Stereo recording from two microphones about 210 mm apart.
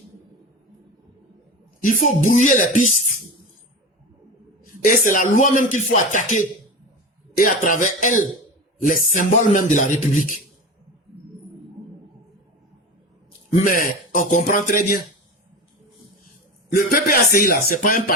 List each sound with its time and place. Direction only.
1.8 s speech: 40° left (ahead or behind)
4.8 s speech: 40° left (ahead or behind)
13.7 s speech: 40° left (ahead or behind)
16.7 s speech: 40° left (ahead or behind)